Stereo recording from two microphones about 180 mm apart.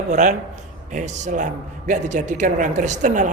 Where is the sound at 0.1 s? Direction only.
45° right (ahead or behind).